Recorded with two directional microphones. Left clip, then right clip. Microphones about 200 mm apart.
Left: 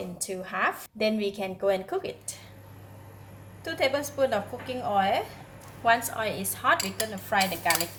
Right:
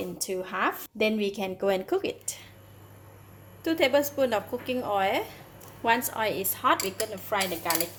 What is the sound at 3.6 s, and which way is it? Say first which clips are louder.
A woman's voice: right 3 dB; 45° right (ahead or behind).